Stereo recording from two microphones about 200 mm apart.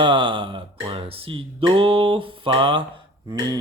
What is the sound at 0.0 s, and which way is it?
Speech, 25° right (ahead or behind).